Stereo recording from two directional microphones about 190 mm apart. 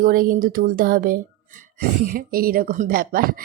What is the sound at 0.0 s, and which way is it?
Speech, 50° right (ahead or behind).